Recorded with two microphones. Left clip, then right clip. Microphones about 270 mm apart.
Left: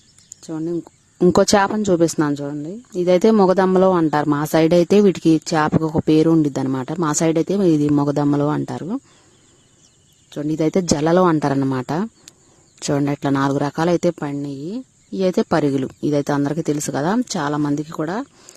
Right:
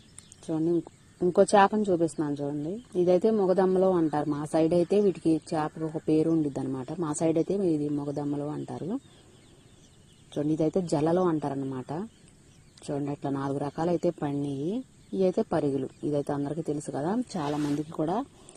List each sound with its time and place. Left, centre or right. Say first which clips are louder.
0.4 s speech: left 2 dB; left
1.2 s a woman's voice: left 6 dB; left
10.2 s a woman's voice: left 7 dB; left